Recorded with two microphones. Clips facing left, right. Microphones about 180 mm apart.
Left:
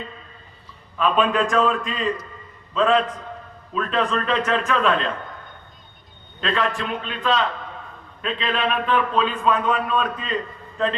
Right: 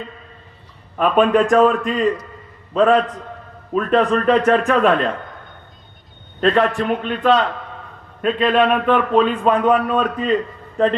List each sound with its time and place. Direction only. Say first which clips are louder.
0.9 s a man's voice: right 5 dB; 55° right (ahead or behind)
6.4 s a man's voice: right 8 dB; 50° right (ahead or behind)